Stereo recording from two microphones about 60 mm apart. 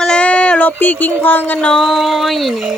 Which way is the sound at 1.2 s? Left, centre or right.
Left.